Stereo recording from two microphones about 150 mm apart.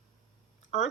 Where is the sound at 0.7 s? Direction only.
50° left (ahead or behind).